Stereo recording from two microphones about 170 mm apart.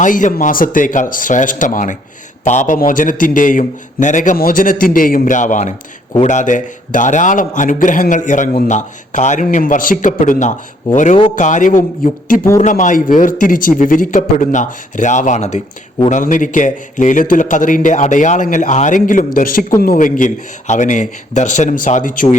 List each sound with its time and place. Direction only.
0.0 s a man's voice: 50° left (ahead or behind)